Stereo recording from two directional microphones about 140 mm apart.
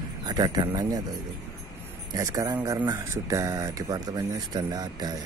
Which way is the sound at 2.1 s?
25° right (ahead or behind).